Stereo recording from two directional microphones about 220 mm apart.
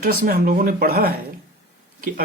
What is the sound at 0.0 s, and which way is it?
Speech, 40° right (ahead or behind).